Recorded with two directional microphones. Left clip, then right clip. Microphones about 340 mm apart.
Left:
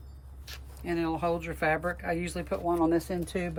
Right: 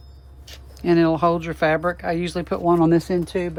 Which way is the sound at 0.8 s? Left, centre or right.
Centre.